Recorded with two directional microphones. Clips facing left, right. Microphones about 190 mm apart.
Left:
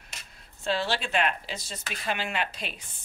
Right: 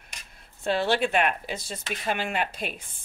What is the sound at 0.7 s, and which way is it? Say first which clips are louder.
Speech: right 5 dB; 55° right (ahead or behind).